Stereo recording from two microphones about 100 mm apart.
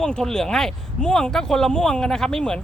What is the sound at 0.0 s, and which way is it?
Speech, 5° left (ahead or behind).